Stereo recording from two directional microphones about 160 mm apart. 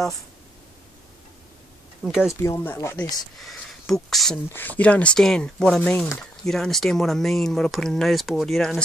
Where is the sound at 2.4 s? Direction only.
15° left (ahead or behind).